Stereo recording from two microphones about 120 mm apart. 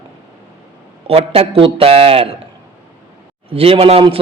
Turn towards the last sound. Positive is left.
turn(degrees=-55)  # may be behind; listen again after turning